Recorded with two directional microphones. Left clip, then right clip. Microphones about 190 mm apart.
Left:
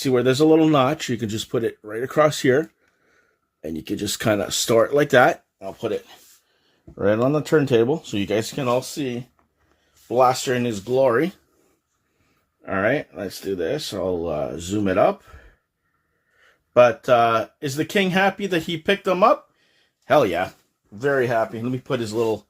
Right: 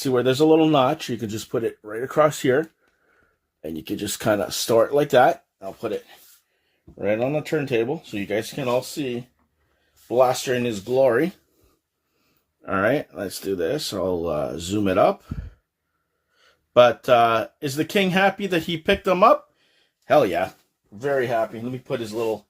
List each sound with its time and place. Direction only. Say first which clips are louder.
0.0 s speech: left 1 dB; 15° left (ahead or behind)
3.8 s speech: left 1 dB; 20° left (ahead or behind)
7.5 s speech: left 5 dB; 40° left (ahead or behind); by 11.3 s 5° left (ahead or behind)
12.6 s speech: even; 10° right (ahead or behind)
16.9 s speech: even; 5° right (ahead or behind)
20.1 s speech: even; 10° left (ahead or behind)
21.0 s speech: left 2 dB; 40° left (ahead or behind)